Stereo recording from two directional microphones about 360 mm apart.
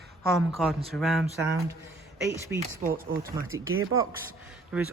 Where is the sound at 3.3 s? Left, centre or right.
Right.